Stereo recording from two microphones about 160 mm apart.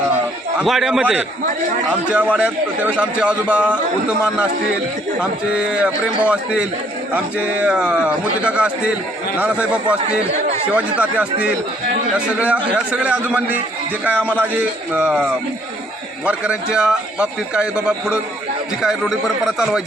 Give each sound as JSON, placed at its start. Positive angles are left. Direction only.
{"t": 0.6, "sound": "a man's voice", "side_deg": -5}
{"t": 5.2, "sound": "a man's voice", "side_deg": -5}
{"t": 10.1, "sound": "speech", "side_deg": -45}
{"t": 10.8, "sound": "a man's voice", "side_deg": -10}
{"t": 14.1, "sound": "a man's voice", "side_deg": 10}
{"t": 14.5, "sound": "a man's voice", "side_deg": -10}